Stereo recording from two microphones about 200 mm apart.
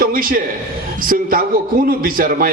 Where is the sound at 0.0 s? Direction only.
45° right (ahead or behind).